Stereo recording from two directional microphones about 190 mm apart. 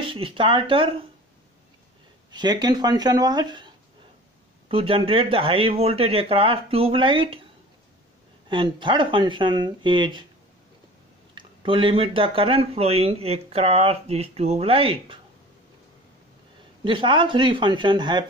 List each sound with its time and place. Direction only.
0.0 s speech: 30° right (ahead or behind)
2.3 s speech: 20° right (ahead or behind)
8.5 s speech: 25° right (ahead or behind)
11.3 s speech: 25° right (ahead or behind)
16.8 s speech: 25° right (ahead or behind)